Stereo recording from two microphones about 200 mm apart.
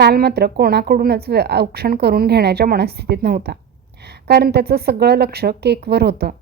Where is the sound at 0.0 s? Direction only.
55° right (ahead or behind).